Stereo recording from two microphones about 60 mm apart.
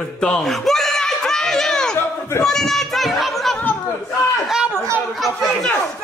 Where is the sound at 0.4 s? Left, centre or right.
Centre.